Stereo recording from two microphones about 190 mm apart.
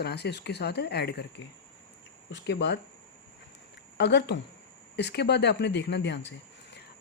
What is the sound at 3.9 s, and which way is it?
A woman's voice, 65° left (ahead or behind).